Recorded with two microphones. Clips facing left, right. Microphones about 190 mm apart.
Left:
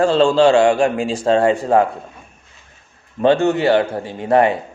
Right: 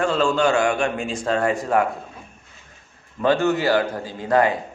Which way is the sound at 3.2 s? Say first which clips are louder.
Left 5 dB; 25° left (ahead or behind).